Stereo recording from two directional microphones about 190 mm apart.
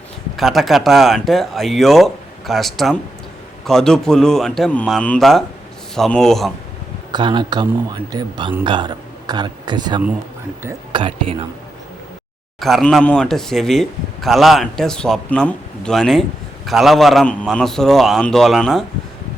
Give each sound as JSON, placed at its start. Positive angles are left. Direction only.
{"t": 0.3, "sound": "a man's voice", "side_deg": 0}
{"t": 7.1, "sound": "a man's voice", "side_deg": -25}
{"t": 12.5, "sound": "a man's voice", "side_deg": 0}